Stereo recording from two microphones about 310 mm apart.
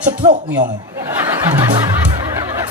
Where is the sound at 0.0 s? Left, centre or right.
Right.